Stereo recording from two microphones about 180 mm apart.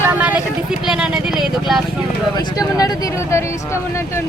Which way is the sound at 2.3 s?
25° left (ahead or behind).